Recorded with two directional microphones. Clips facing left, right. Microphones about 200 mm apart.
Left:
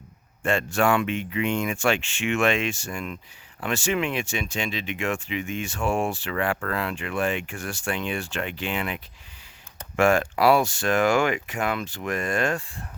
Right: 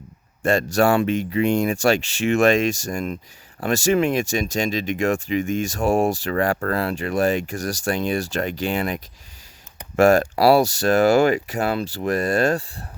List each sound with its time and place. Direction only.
0.4 s speech: 40° right (ahead or behind)